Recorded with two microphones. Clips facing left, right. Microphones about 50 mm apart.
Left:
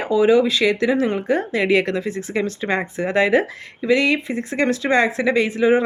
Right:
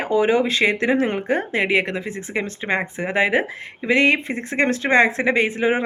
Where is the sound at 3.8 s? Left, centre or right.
Right.